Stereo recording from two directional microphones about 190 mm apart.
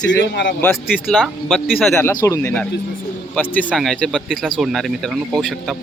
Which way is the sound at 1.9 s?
15° left (ahead or behind).